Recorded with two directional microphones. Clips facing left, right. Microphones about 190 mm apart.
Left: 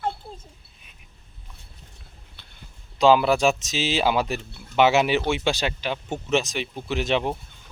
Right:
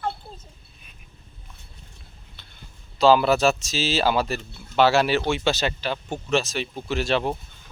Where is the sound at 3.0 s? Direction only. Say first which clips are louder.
Even; 15° left (ahead or behind).